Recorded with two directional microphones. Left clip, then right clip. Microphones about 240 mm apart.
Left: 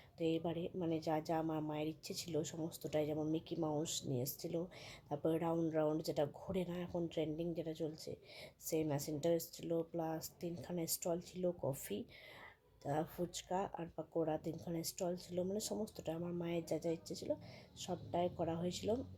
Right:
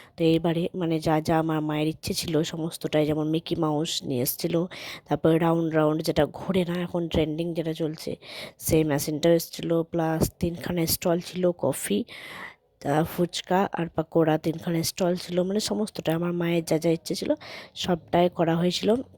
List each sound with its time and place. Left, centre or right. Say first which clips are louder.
0.2 s speech: right 16 dB; right